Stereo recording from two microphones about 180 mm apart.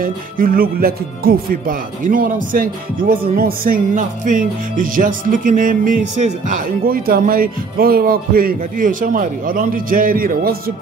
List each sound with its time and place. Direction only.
0.0 s speech: 55° right (ahead or behind)